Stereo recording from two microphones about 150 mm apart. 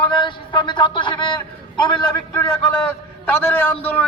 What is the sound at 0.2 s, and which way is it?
A man's voice, 30° left (ahead or behind).